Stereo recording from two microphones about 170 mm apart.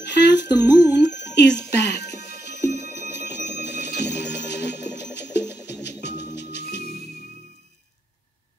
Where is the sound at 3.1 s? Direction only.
90° left.